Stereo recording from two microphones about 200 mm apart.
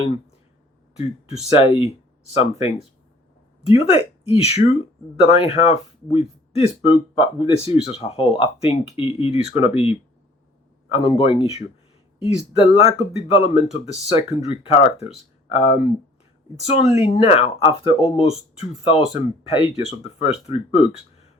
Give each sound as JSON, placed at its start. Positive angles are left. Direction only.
{"t": 1.5, "sound": "speech", "side_deg": 30}
{"t": 3.8, "sound": "speech", "side_deg": 30}